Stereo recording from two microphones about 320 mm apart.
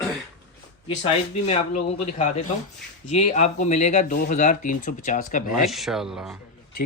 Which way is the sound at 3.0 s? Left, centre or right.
Left.